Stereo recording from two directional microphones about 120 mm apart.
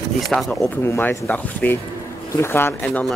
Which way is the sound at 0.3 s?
Centre (ahead or behind).